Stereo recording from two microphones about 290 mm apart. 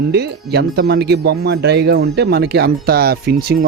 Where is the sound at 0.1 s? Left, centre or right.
Right.